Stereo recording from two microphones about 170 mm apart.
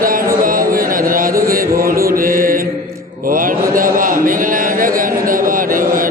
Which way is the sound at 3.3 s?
55° right (ahead or behind).